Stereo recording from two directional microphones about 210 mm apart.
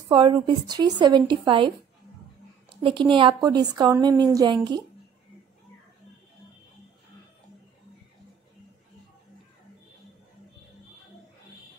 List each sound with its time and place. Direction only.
0.1 s a woman's voice: 25° right (ahead or behind)
2.8 s a woman's voice: 25° right (ahead or behind)